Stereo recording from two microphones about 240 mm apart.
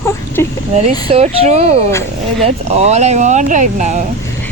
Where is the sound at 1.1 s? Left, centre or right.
Right.